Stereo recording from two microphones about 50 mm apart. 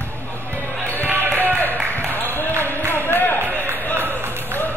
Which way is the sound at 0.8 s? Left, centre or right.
Left.